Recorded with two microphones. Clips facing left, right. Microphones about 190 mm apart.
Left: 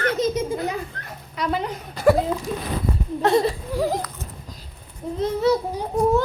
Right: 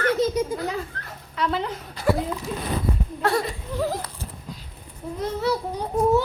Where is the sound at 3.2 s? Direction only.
20° left (ahead or behind).